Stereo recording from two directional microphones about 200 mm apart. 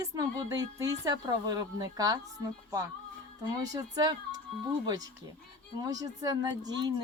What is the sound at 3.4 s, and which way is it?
Speech, 20° right (ahead or behind).